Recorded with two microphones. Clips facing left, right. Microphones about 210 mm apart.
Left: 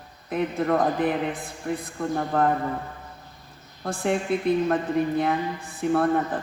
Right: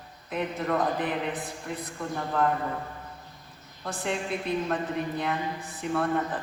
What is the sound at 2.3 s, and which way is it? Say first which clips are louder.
Speech: left 3 dB; 60° left (ahead or behind).